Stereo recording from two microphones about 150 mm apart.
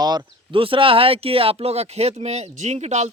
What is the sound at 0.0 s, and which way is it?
Speech, 30° right (ahead or behind).